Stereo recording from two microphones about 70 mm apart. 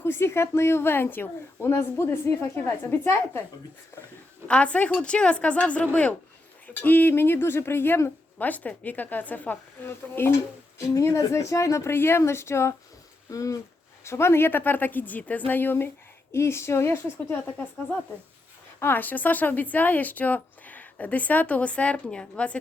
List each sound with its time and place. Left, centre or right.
0.0 s a woman's voice: left
4.4 s a woman's voice: centre; by 8.1 s left
8.4 s speech: left
10.8 s a woman's voice: left
13.3 s a woman's voice: left
14.0 s a woman's voice: left
18.8 s speech: left